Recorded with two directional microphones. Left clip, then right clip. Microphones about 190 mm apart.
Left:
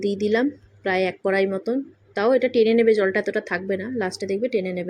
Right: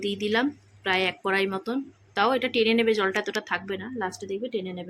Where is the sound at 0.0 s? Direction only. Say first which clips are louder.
Left 4 dB; 20° left (ahead or behind).